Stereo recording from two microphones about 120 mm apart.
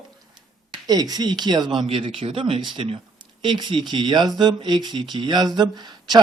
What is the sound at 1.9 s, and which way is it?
Speech, 50° right (ahead or behind).